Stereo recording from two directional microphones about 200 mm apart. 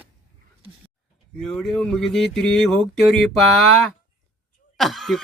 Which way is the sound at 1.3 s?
5° left (ahead or behind).